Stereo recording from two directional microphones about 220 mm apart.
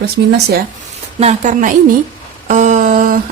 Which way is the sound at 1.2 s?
30° right (ahead or behind).